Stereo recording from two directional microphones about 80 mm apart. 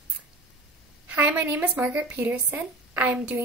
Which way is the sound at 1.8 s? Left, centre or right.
Centre.